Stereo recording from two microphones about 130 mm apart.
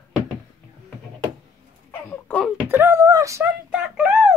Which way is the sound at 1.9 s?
10° left (ahead or behind).